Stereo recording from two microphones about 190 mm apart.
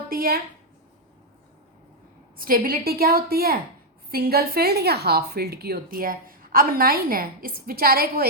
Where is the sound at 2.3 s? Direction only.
50° right (ahead or behind).